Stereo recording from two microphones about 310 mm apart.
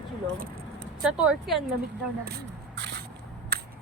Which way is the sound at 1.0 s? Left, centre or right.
Centre.